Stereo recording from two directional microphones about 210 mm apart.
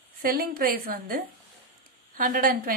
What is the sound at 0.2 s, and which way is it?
A woman's voice, 45° right (ahead or behind).